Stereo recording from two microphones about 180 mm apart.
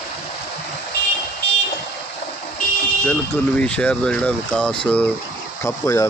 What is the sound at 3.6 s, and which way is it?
Speech, 5° left (ahead or behind).